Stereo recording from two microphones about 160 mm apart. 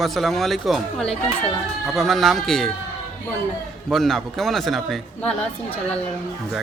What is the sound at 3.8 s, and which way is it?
Speech, centre (ahead or behind).